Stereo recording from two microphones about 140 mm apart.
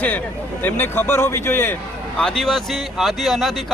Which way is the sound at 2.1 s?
5° left (ahead or behind).